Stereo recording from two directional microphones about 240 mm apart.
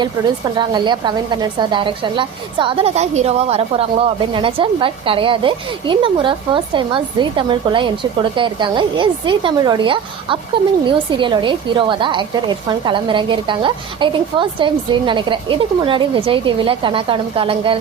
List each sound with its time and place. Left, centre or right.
0.0 s a woman's voice: centre